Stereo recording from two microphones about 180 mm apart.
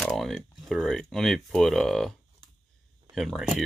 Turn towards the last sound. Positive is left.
turn(degrees=0)  # may be behind; listen again after turning